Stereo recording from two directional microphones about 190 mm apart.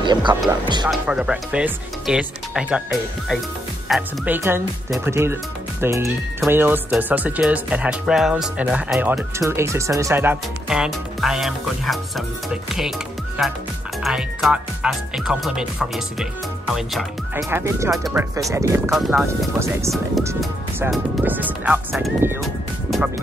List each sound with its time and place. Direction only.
0.0 s speech: 25° right (ahead or behind)
0.3 s speech: 10° right (ahead or behind)
14.0 s speech: 5° right (ahead or behind)
17.5 s speech: 15° right (ahead or behind)
18.9 s speech: centre (ahead or behind)
20.9 s speech: 10° right (ahead or behind)